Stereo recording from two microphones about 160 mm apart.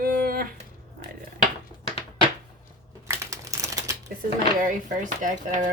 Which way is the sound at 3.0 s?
20° right (ahead or behind).